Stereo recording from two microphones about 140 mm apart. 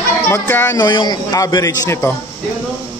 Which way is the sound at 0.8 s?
30° left (ahead or behind).